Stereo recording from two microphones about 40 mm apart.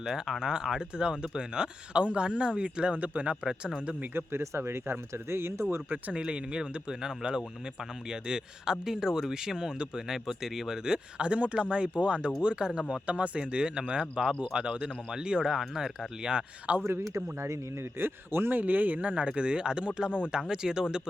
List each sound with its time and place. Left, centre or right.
0.0 s speech: centre; by 3.3 s right
4.1 s speech: right
6.1 s speech: right
10.1 s speech: centre
16.7 s speech: right
18.0 s a man's voice: right
18.6 s speech: right
19.3 s speech: right